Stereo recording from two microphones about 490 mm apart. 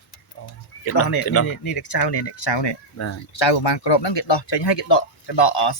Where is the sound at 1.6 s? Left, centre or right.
Left.